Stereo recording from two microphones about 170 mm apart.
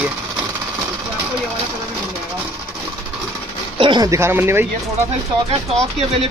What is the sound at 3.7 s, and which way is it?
Speech, 30° right (ahead or behind).